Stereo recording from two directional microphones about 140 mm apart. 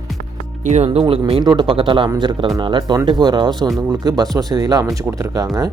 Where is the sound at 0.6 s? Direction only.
50° right (ahead or behind).